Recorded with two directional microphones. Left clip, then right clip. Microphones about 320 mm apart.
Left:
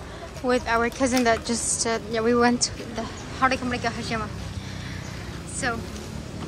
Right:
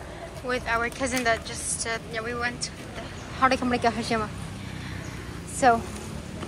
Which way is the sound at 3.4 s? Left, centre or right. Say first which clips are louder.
Right 1 dB; centre.